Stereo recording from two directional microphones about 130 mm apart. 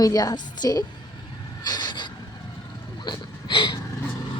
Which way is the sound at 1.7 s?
35° left (ahead or behind).